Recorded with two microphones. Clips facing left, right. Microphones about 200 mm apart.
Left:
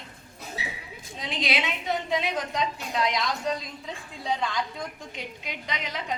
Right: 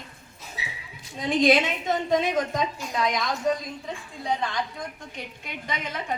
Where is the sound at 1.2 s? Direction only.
50° right (ahead or behind).